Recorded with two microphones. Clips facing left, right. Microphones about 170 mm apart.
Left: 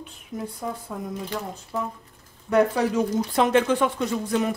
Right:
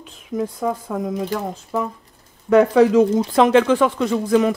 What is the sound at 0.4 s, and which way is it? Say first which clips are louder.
Speech: right 9 dB; 90° right.